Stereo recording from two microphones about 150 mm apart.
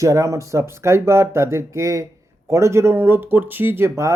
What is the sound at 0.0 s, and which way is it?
Speech, 20° right (ahead or behind).